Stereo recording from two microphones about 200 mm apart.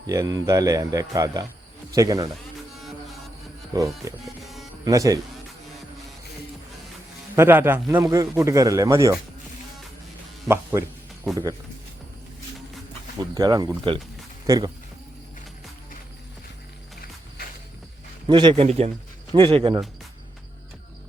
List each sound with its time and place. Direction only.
0.1 s a man's voice: 20° right (ahead or behind)
3.7 s a man's voice: 15° right (ahead or behind)
7.3 s a man's voice: 10° right (ahead or behind)
10.5 s a man's voice: 15° right (ahead or behind)
13.3 s speech: 20° right (ahead or behind)
18.3 s speech: 25° right (ahead or behind)